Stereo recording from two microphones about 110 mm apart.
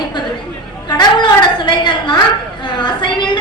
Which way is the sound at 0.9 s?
40° left (ahead or behind).